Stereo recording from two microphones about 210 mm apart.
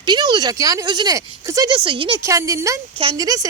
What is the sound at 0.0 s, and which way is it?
Speech, 20° right (ahead or behind).